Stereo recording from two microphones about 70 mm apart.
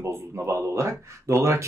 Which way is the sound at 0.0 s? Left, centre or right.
Right.